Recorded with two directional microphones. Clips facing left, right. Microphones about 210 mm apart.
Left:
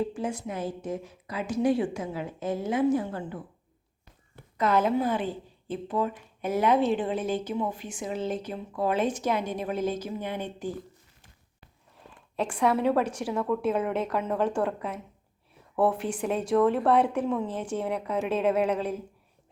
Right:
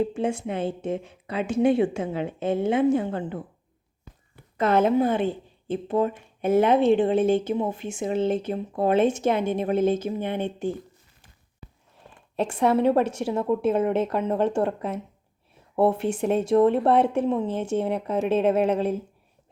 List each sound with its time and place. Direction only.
0.0 s a woman's voice: 25° right (ahead or behind)
4.5 s a woman's voice: 25° right (ahead or behind)
12.4 s a woman's voice: 25° right (ahead or behind)